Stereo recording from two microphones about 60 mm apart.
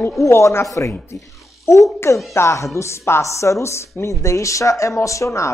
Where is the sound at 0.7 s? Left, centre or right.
Left.